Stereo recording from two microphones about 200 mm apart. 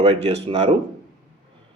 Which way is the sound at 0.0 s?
30° right (ahead or behind).